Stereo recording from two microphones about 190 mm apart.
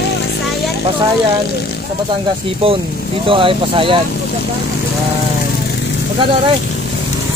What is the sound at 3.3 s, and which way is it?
Speech, 25° right (ahead or behind).